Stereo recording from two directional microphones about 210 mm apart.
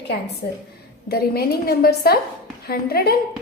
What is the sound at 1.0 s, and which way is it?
A woman's voice, 50° left (ahead or behind).